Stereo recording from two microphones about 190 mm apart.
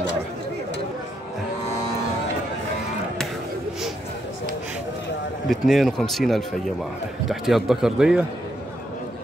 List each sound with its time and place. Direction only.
5.5 s speech: centre (ahead or behind)